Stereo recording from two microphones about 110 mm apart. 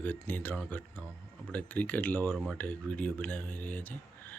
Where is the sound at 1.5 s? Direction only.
15° left (ahead or behind).